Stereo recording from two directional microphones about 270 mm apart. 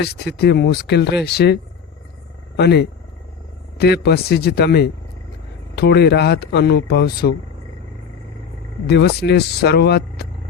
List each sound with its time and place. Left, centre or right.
0.0 s speech: left
2.6 s speech: left
8.9 s speech: left